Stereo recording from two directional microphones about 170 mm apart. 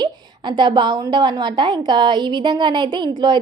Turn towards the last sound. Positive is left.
turn(degrees=-25)  # may be behind; listen again after turning